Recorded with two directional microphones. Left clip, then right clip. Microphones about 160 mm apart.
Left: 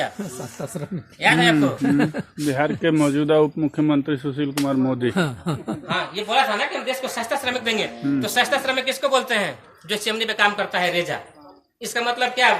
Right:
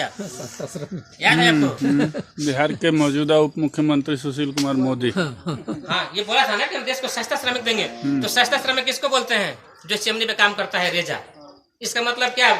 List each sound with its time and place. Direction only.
1.2 s speech: 20° left (ahead or behind)
1.9 s speech: 45° left (ahead or behind)
2.5 s speech: 10° right (ahead or behind)
5.1 s speech: 45° left (ahead or behind)
5.9 s speech: 10° left (ahead or behind)